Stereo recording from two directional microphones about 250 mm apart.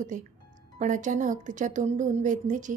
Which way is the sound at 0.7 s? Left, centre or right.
Right.